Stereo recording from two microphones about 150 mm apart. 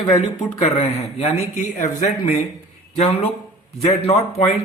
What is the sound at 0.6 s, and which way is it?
Speech, 45° left (ahead or behind).